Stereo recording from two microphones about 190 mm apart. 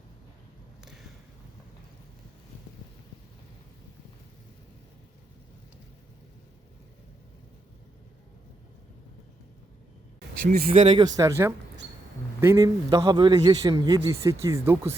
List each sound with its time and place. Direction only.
10.7 s speech: 35° right (ahead or behind)
11.2 s a man's voice: 15° right (ahead or behind)